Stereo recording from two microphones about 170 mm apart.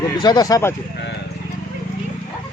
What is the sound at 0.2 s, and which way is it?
Speech, 25° left (ahead or behind).